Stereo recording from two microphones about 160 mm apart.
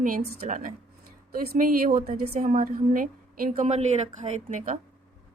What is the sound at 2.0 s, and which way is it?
A woman's voice, 50° right (ahead or behind).